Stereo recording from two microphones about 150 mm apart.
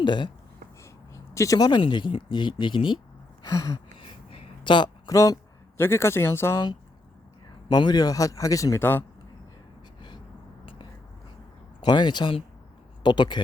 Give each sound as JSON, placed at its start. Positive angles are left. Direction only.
{"t": 0.0, "sound": "speech", "side_deg": 30}
{"t": 0.8, "sound": "speech", "side_deg": 20}
{"t": 3.4, "sound": "speech", "side_deg": 25}
{"t": 3.9, "sound": "a sound", "side_deg": 40}
{"t": 5.1, "sound": "speech", "side_deg": 20}
{"t": 7.7, "sound": "speech", "side_deg": 25}
{"t": 11.8, "sound": "speech", "side_deg": 30}